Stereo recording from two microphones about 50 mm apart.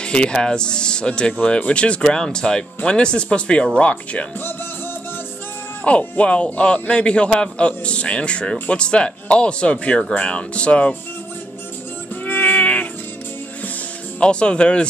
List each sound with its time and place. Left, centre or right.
0.0 s music: centre
0.3 s a man's voice: centre
5.9 s a man's voice: left
12.3 s music: left
14.2 s a man's voice: left